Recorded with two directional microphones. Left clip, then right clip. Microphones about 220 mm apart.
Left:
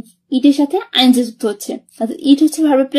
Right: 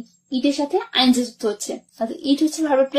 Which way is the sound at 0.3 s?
45° left (ahead or behind).